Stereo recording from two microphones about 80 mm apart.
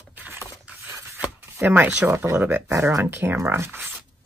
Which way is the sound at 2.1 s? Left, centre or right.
Right.